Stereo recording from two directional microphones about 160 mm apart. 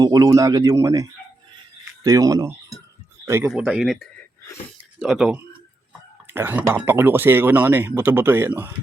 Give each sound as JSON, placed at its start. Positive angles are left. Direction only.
{"t": 0.0, "sound": "speech", "side_deg": -20}
{"t": 2.0, "sound": "speech", "side_deg": -20}
{"t": 3.5, "sound": "speech", "side_deg": 0}